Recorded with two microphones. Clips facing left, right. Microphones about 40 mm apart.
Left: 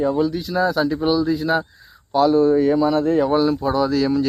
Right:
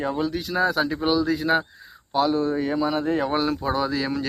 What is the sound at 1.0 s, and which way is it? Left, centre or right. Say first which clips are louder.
Speech: left 2 dB; right.